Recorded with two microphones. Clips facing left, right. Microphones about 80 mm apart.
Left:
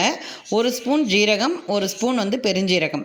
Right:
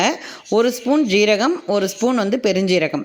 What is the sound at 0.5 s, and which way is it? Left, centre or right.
A man's voice, right.